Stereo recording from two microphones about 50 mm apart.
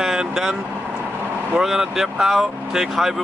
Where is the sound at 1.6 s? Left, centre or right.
Centre.